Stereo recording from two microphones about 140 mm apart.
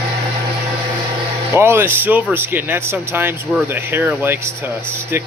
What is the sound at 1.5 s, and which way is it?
Speech, 15° right (ahead or behind).